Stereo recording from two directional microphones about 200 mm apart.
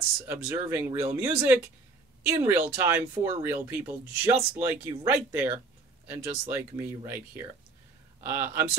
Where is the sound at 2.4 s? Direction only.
10° right (ahead or behind).